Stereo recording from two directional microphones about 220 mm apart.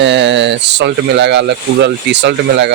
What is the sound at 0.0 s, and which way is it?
Speech, 55° right (ahead or behind).